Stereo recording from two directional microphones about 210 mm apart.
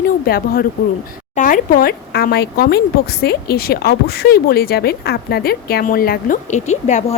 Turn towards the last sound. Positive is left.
turn(degrees=35)  # may be behind; listen again after turning